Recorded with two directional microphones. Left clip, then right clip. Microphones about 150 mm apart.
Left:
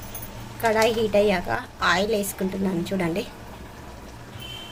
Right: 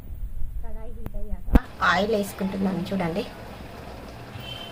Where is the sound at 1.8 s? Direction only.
10° left (ahead or behind).